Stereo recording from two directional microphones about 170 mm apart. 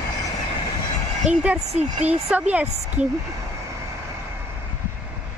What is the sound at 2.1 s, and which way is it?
Speech, 10° right (ahead or behind).